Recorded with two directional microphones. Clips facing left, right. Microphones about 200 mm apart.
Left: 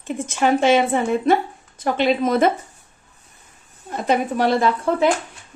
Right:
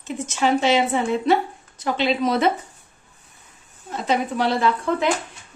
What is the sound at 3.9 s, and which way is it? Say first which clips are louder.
Speech: left 2 dB; 55° left (ahead or behind).